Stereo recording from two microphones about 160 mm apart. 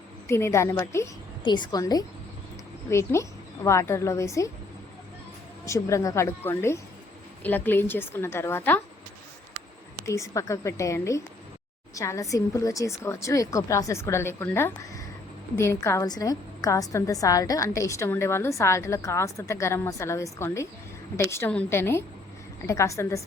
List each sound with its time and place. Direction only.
0.3 s a woman's voice: 15° left (ahead or behind)
5.6 s a woman's voice: 20° left (ahead or behind)
10.1 s a woman's voice: 20° left (ahead or behind)